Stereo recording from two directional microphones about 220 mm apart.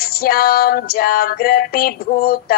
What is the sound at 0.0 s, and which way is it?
A woman's voice, 45° left (ahead or behind).